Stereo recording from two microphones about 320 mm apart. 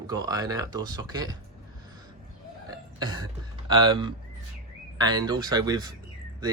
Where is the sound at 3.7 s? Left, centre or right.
Centre.